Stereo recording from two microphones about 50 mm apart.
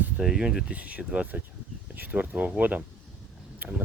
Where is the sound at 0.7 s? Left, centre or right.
Right.